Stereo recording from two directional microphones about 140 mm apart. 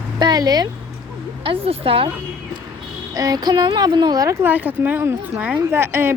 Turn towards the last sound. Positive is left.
turn(degrees=-15)  # may be behind; listen again after turning